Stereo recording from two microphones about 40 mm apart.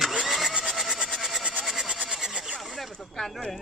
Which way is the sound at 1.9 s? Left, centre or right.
Right.